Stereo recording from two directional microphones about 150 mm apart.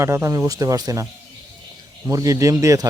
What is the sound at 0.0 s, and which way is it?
Speech, 20° right (ahead or behind).